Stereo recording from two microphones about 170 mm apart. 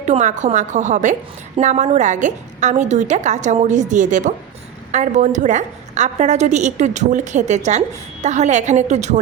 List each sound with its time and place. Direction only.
0.0 s a woman's voice: 45° right (ahead or behind)